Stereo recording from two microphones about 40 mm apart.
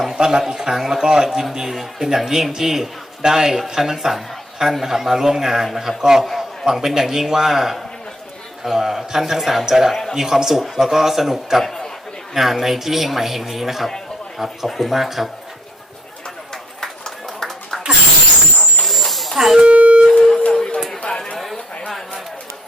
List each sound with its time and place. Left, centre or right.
0.0 s a man's voice: centre
9.9 s a man's voice: centre
10.2 s a man's voice: centre
11.6 s a man's voice: centre
12.3 s a man's voice: centre
16.8 s run: centre
18.9 s a sound: centre
19.6 s a sound: right
20.1 s a sound: centre
21.3 s chatter: centre